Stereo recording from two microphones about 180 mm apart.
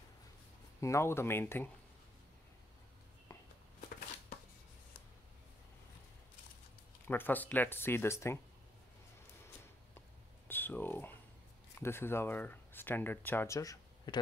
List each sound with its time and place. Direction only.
0.7 s speech: 15° left (ahead or behind)
3.3 s walk: 20° left (ahead or behind)
7.1 s speech: 10° left (ahead or behind)
10.5 s speech: 10° left (ahead or behind)